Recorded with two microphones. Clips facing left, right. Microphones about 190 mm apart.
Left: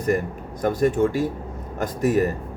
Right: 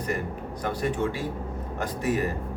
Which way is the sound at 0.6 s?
45° left (ahead or behind).